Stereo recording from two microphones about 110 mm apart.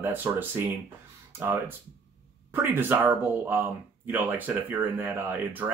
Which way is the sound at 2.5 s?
20° right (ahead or behind).